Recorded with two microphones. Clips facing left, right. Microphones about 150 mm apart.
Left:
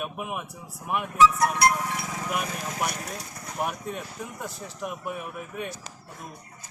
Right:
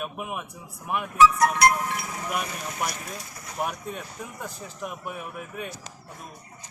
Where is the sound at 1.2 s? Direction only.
90° right.